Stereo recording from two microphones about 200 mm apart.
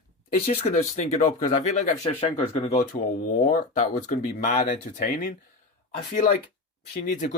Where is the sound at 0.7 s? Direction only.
40° left (ahead or behind).